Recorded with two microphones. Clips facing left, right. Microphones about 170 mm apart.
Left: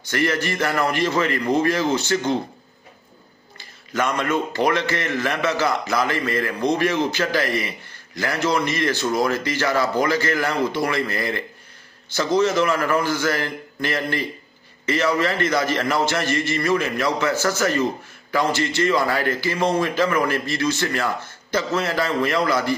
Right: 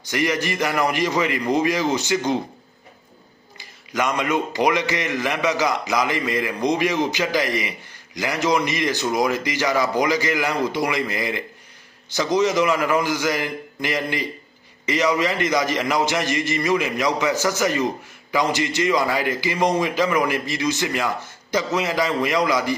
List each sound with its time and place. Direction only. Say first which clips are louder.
0.0 s a man's voice: even; 15° right (ahead or behind)
3.6 s a man's voice: even; 15° right (ahead or behind)